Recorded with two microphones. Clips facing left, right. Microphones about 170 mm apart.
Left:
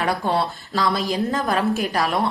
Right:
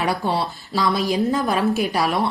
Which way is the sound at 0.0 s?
5° right (ahead or behind).